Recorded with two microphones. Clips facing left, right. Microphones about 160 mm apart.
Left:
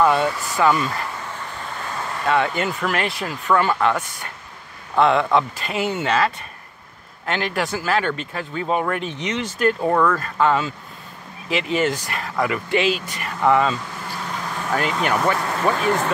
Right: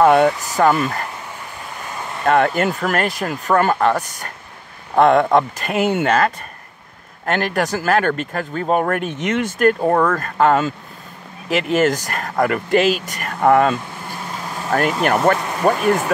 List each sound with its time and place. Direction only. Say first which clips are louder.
0.0 s speech: right 5 dB; 50° right (ahead or behind)
1.6 s vehicle: even; 15° right (ahead or behind)
2.2 s speech: right 5 dB; 50° right (ahead or behind)
9.8 s speech: right 2 dB; 40° right (ahead or behind)
14.0 s vehicle: even; 20° right (ahead or behind)
15.3 s a sound: right 1 dB; 15° right (ahead or behind)
15.7 s speech: right 3 dB; 10° right (ahead or behind)